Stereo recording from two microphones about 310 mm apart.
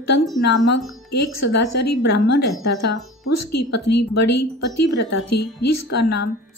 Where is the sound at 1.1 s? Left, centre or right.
Left.